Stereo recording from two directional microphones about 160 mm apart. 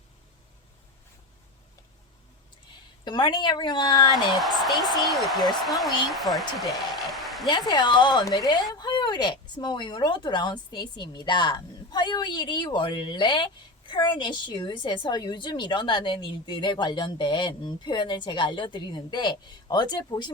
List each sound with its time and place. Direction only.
3.0 s speech: 30° left (ahead or behind)
4.4 s a woman's voice: centre (ahead or behind)
6.6 s a sound: centre (ahead or behind)
7.4 s speech: 25° left (ahead or behind)